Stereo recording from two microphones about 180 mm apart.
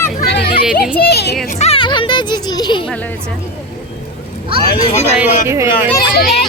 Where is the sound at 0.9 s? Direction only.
65° left (ahead or behind).